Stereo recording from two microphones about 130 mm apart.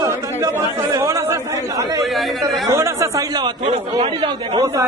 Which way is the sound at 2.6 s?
25° right (ahead or behind).